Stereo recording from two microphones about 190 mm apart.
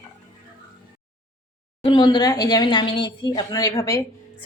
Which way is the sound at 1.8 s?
25° left (ahead or behind).